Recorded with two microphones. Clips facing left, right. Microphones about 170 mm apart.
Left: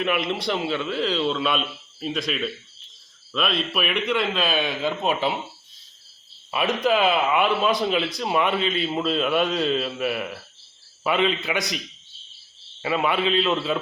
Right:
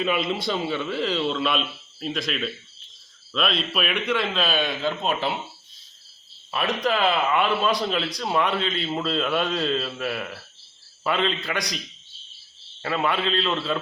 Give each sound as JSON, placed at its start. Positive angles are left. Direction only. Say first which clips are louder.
{"t": 0.7, "sound": "a man's voice", "louder": "left 1 dB", "side_deg": -5}
{"t": 6.5, "sound": "a man's voice", "louder": "left 3 dB", "side_deg": 5}
{"t": 12.8, "sound": "a man's voice", "louder": "left 2 dB", "side_deg": 5}